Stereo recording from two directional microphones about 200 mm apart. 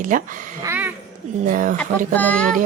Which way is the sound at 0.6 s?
10° right (ahead or behind).